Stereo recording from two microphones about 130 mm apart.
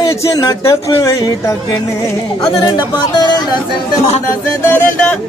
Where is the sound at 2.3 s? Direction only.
40° left (ahead or behind).